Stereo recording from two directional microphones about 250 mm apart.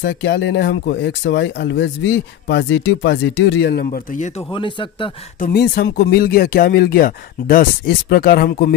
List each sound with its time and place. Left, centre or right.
0.0 s speech: left
4.5 s speech: centre
5.4 s speech: left